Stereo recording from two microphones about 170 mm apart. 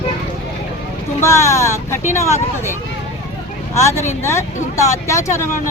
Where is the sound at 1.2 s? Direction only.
15° left (ahead or behind).